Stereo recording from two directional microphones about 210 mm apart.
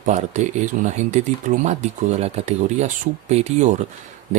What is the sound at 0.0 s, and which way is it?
Speech, 35° right (ahead or behind).